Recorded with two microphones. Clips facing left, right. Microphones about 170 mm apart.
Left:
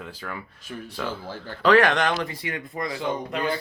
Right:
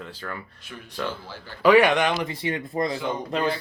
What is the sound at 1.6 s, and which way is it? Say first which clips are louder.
Speech: right 2 dB; 10° right (ahead or behind).